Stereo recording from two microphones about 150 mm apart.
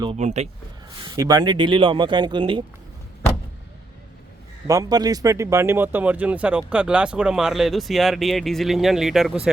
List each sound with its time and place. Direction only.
0.2 s speech: 50° right (ahead or behind)
0.9 s speech: 25° right (ahead or behind)
4.6 s speech: 20° right (ahead or behind); by 9.5 s 5° right (ahead or behind)